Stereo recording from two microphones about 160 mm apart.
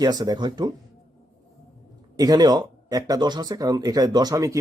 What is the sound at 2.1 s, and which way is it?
A man's voice, 25° right (ahead or behind).